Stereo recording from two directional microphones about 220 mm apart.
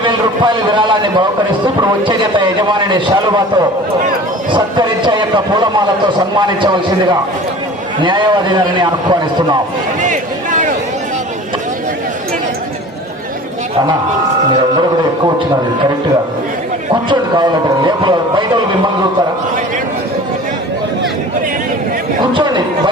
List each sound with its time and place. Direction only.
0.0 s a man's voice: 20° right (ahead or behind)
8.0 s a man's voice: 20° right (ahead or behind)
10.0 s a sound: 35° right (ahead or behind)
16.9 s a man's voice: 20° right (ahead or behind)
22.2 s a man's voice: 20° right (ahead or behind)